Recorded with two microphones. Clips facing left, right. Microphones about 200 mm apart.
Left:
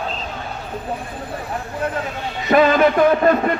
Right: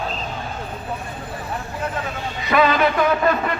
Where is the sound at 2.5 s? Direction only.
45° left (ahead or behind).